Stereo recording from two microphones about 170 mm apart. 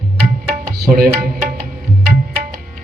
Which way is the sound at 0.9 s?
60° right (ahead or behind).